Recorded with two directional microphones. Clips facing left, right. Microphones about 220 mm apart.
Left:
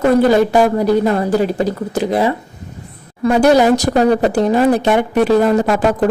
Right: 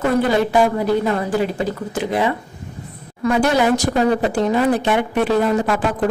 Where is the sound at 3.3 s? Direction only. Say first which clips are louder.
Left 6 dB; 40° left (ahead or behind).